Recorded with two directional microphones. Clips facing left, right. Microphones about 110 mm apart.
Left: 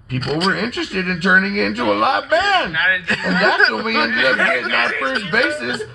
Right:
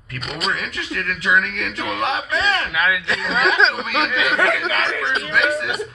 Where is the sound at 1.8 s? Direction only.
50° left (ahead or behind).